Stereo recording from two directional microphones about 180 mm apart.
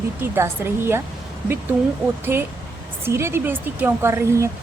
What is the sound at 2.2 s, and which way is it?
A woman's voice, 10° right (ahead or behind).